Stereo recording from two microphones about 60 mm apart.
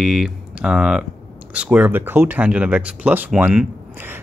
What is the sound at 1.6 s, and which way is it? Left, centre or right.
Speech, right.